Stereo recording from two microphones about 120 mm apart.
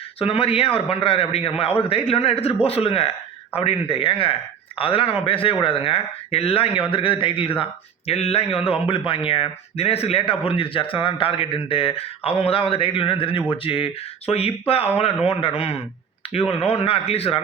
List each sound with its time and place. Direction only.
0.2 s speech: 55° left (ahead or behind)